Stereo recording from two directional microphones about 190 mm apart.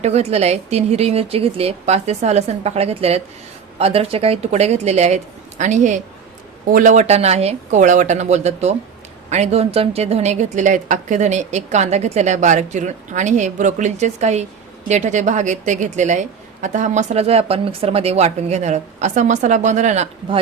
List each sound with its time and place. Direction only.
0.0 s a woman's voice: 35° right (ahead or behind)